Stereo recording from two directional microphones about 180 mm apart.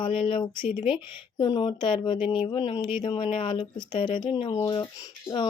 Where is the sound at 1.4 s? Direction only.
25° left (ahead or behind).